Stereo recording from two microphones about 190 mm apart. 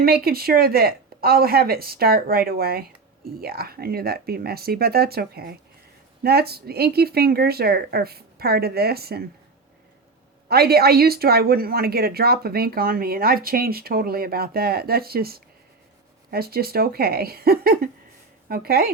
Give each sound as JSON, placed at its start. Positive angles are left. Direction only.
{"t": 0.0, "sound": "speech", "side_deg": -50}
{"t": 10.5, "sound": "speech", "side_deg": -55}